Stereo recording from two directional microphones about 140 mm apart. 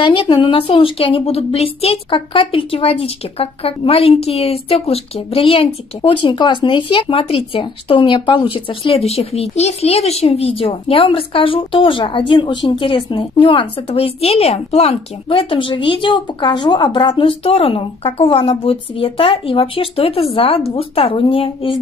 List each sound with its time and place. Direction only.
0.0 s a woman's voice: 35° left (ahead or behind)